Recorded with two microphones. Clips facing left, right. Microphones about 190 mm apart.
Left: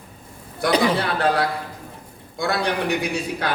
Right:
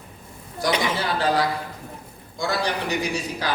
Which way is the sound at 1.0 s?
60° left (ahead or behind).